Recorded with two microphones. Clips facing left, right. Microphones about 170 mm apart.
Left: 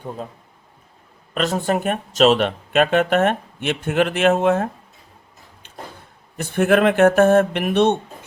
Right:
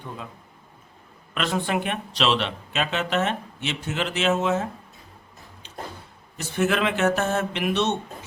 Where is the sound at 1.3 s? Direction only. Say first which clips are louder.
Left 5 dB; 40° left (ahead or behind).